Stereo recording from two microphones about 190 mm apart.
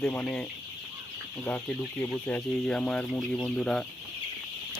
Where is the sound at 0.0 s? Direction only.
10° left (ahead or behind).